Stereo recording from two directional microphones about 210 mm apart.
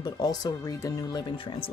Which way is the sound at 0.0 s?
20° left (ahead or behind).